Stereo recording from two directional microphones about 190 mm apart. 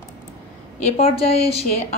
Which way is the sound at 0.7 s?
35° left (ahead or behind).